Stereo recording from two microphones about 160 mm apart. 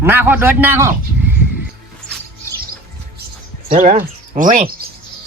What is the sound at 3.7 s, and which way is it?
Speech, 50° right (ahead or behind).